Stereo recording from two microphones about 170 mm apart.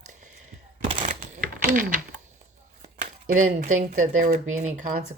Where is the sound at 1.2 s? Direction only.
50° right (ahead or behind).